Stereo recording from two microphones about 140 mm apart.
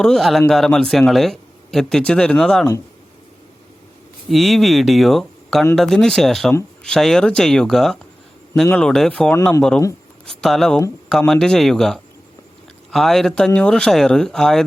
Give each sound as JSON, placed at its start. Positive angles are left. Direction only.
{"t": 0.0, "sound": "speech", "side_deg": 0}
{"t": 4.3, "sound": "speech", "side_deg": 0}
{"t": 9.3, "sound": "speech", "side_deg": 15}
{"t": 10.2, "sound": "speech", "side_deg": 0}